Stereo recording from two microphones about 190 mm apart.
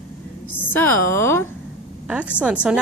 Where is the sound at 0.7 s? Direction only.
10° left (ahead or behind).